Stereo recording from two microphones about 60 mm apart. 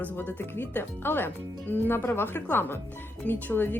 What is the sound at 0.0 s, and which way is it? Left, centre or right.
Speech, left.